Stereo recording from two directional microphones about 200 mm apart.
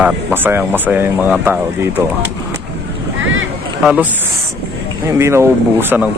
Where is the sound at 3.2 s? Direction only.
75° right (ahead or behind).